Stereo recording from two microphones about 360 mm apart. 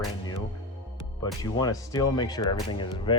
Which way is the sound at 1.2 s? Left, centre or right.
Centre.